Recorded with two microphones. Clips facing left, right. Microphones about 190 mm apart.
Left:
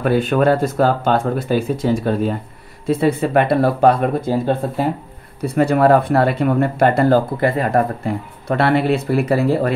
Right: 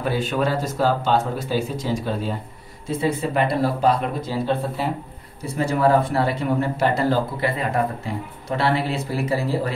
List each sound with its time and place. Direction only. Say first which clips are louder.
0.0 s speech: left 7 dB; 55° left (ahead or behind)
5.4 s speech: left 6 dB; 60° left (ahead or behind)